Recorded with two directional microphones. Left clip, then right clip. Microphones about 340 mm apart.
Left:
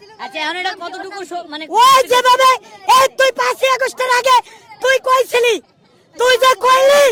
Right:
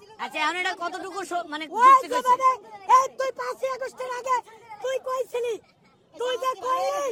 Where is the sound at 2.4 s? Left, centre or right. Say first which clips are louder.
Left 10 dB; left.